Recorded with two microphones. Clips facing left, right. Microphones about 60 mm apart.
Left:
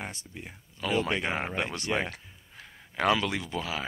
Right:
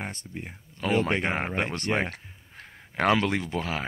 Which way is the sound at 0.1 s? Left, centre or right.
Right.